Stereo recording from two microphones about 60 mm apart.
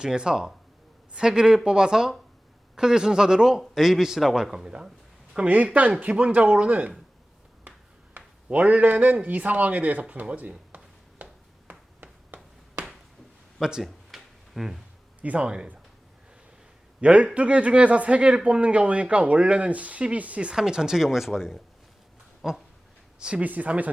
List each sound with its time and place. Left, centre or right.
0.0 s speech: centre
5.5 s speech: right
8.4 s speech: right
11.7 s a sound: right
13.6 s a sound: centre
15.2 s speech: right
17.0 s a man's voice: right; by 21.6 s centre
22.4 s a sound: centre
23.2 s speech: right